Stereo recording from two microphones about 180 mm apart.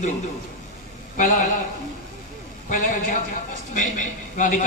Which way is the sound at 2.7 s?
45° left (ahead or behind).